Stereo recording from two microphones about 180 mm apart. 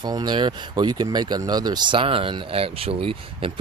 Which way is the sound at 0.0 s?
25° right (ahead or behind).